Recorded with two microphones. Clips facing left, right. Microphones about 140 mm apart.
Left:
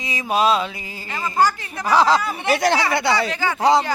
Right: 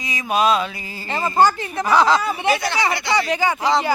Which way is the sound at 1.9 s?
35° left (ahead or behind).